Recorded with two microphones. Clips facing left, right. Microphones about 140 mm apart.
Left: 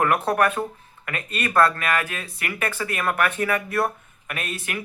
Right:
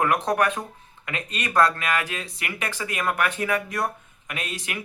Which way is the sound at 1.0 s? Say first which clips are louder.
Left 2 dB; 20° right (ahead or behind).